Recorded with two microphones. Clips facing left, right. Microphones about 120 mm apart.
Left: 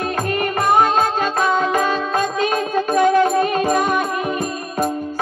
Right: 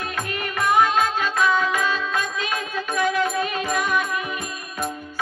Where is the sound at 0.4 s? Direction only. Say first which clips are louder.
Left 3 dB; 50° left (ahead or behind).